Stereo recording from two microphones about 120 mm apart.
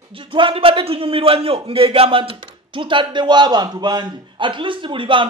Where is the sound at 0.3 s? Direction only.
45° right (ahead or behind).